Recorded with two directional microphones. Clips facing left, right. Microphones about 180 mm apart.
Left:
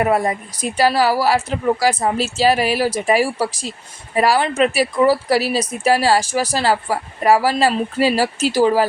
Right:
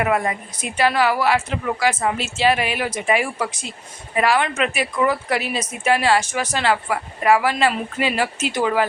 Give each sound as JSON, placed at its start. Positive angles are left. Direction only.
{"t": 0.0, "sound": "a woman's voice", "side_deg": 35}